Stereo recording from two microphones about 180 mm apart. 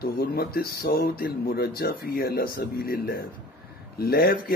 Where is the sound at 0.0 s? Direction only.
55° left (ahead or behind).